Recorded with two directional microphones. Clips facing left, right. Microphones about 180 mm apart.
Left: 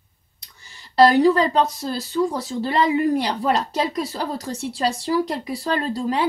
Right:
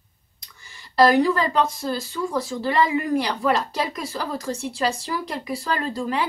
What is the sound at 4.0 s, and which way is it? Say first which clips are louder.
Speech: left 4 dB; 35° left (ahead or behind).